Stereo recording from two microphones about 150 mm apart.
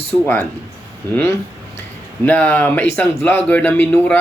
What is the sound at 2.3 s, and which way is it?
A man's voice, 10° left (ahead or behind).